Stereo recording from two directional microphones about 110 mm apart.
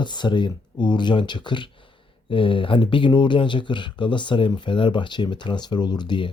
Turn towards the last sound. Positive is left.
turn(degrees=45)  # may be behind; listen again after turning